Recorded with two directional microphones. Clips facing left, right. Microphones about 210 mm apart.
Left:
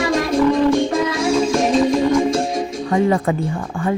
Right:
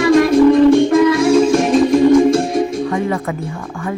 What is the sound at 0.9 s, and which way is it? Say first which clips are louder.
Music: right 7 dB; 60° right (ahead or behind).